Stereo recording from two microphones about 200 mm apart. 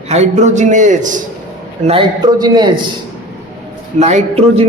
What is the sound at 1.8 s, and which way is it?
Speech, 25° right (ahead or behind).